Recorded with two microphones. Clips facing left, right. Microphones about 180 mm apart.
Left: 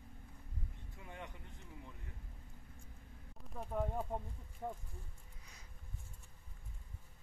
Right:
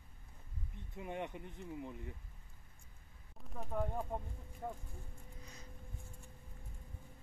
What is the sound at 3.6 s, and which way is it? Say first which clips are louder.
Speech: even; 5° left (ahead or behind).